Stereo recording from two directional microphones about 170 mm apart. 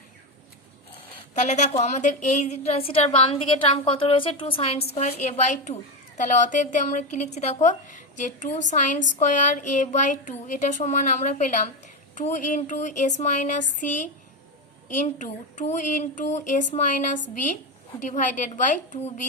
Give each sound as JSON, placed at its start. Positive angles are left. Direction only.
{"t": 1.3, "sound": "a woman's voice", "side_deg": 45}